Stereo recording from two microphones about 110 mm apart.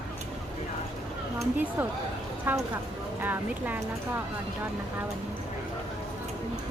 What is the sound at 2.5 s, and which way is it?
Speech, 15° right (ahead or behind).